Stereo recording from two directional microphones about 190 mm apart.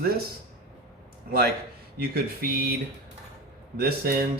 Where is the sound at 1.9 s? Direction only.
55° right (ahead or behind).